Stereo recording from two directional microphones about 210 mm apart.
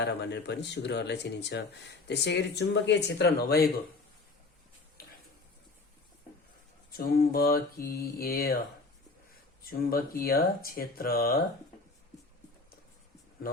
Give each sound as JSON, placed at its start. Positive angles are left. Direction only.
{"t": 0.0, "sound": "speech", "side_deg": 55}
{"t": 6.9, "sound": "speech", "side_deg": 45}
{"t": 9.6, "sound": "speech", "side_deg": 45}